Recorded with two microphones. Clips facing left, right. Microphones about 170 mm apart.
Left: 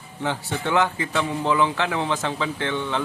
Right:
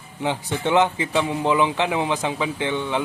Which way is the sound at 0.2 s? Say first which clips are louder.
Right 2 dB; 15° right (ahead or behind).